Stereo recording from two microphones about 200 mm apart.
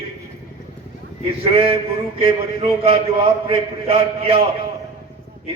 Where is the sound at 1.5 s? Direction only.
30° right (ahead or behind).